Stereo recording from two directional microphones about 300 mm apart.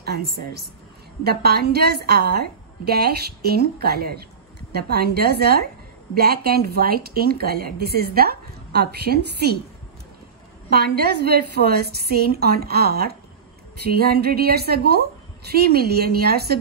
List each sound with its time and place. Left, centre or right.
0.0 s a woman's voice: right
10.7 s speech: right